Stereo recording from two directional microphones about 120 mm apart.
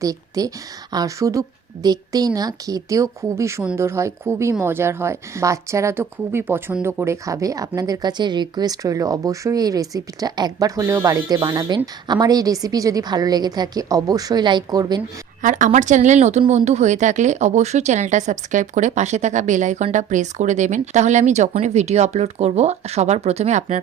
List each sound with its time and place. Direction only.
0.0 s a woman's voice: 30° right (ahead or behind)
15.4 s speech: 90° right; by 23.8 s 75° right (ahead or behind)